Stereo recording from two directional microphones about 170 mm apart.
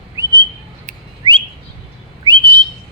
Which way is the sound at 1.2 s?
25° right (ahead or behind).